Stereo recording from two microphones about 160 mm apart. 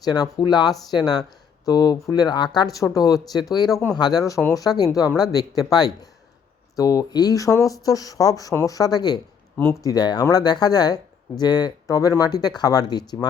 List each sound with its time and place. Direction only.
0.0 s speech: 25° left (ahead or behind)